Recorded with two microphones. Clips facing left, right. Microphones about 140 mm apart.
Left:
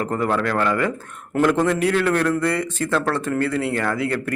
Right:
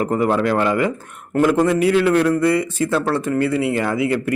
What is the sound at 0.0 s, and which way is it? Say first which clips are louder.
A man's voice: right 4 dB; 15° right (ahead or behind).